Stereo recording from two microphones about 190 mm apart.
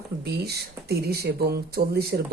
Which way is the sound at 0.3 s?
60° right (ahead or behind).